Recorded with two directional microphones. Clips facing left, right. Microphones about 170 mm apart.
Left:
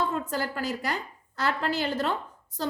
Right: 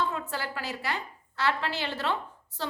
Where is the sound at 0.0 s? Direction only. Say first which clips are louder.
Left 3 dB; 45° left (ahead or behind).